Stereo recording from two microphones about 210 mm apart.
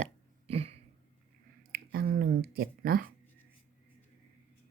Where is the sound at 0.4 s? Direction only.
30° right (ahead or behind).